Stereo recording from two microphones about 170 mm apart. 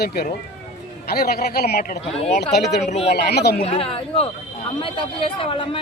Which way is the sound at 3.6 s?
35° left (ahead or behind).